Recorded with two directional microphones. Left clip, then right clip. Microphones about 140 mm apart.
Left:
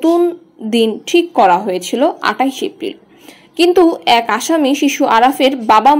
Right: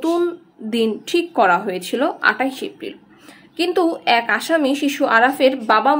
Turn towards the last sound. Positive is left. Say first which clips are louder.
# left 6 dB
turn(degrees=25)  # may be behind; listen again after turning